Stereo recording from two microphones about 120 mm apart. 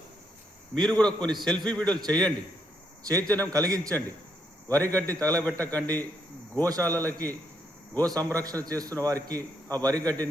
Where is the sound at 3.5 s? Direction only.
30° right (ahead or behind).